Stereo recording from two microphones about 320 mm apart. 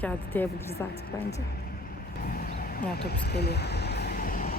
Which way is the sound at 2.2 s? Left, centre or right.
Left.